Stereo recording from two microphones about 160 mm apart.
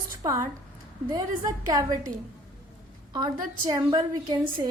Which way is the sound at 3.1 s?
25° right (ahead or behind).